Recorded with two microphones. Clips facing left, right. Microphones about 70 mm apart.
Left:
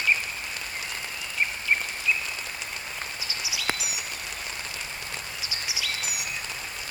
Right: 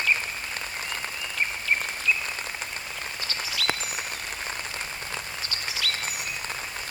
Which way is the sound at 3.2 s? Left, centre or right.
Centre.